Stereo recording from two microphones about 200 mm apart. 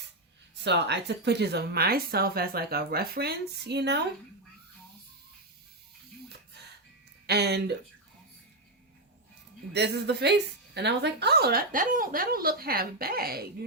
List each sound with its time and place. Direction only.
0.6 s speech: 60° right (ahead or behind)
7.3 s speech: 55° right (ahead or behind)
9.7 s speech: 55° right (ahead or behind)